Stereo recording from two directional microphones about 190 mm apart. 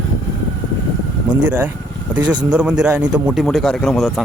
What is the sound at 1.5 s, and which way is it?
A man's voice, 10° right (ahead or behind).